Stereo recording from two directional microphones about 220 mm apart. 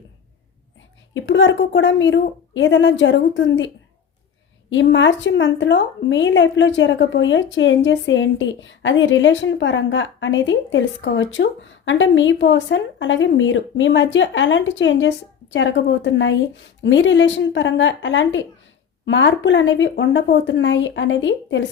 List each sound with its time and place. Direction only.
1.1 s a woman's voice: 55° left (ahead or behind)
4.7 s a woman's voice: 55° left (ahead or behind)